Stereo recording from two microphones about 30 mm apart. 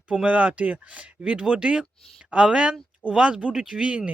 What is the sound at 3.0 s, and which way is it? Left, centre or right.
Speech, left.